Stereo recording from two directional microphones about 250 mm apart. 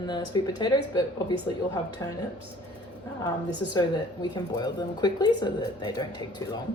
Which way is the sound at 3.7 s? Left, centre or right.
Centre.